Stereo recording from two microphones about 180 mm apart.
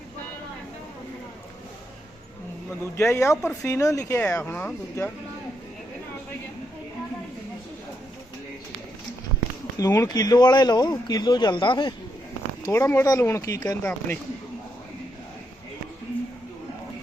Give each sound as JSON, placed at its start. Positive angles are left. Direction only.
{"t": 2.9, "sound": "speech", "side_deg": 15}
{"t": 9.7, "sound": "speech", "side_deg": 20}
{"t": 12.6, "sound": "speech", "side_deg": 15}